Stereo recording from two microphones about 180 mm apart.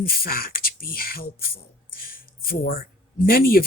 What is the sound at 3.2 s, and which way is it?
Speech, 55° left (ahead or behind).